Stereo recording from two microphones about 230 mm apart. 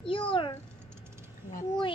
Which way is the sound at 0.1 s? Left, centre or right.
Left.